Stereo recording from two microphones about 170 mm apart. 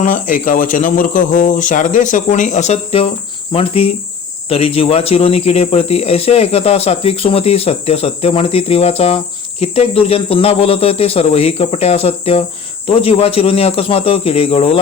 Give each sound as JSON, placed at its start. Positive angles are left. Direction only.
{"t": 0.0, "sound": "speech", "side_deg": 50}